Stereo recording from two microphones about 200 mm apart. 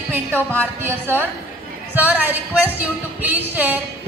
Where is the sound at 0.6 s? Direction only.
10° right (ahead or behind).